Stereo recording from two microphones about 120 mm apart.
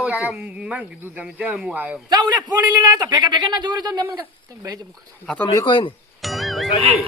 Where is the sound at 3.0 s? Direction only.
35° right (ahead or behind).